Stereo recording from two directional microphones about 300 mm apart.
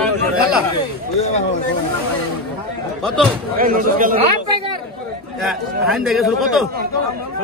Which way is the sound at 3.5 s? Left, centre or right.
Right.